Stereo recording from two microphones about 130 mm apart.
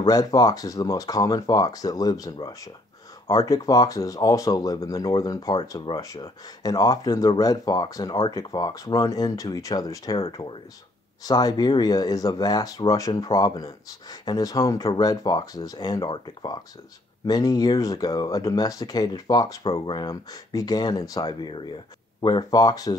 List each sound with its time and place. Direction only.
0.0 s speech: 30° left (ahead or behind)